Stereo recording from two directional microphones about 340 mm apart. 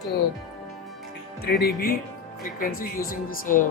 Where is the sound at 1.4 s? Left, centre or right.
Left.